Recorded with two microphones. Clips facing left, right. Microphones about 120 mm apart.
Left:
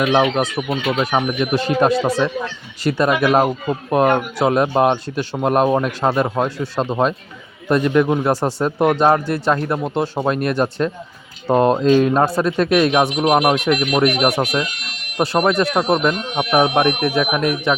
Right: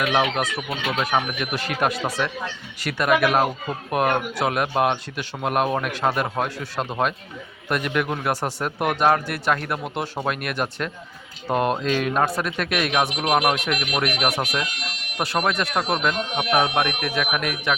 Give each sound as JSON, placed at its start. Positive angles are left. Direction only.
{"t": 0.0, "sound": "speech", "side_deg": 30}